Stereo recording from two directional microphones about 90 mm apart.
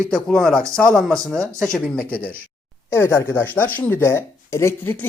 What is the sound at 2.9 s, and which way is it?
Speech, 30° left (ahead or behind).